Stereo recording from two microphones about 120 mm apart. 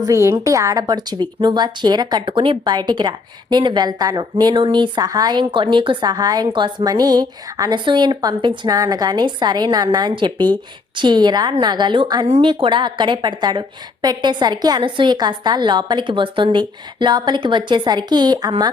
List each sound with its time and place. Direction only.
0.0 s a woman's voice: 25° right (ahead or behind)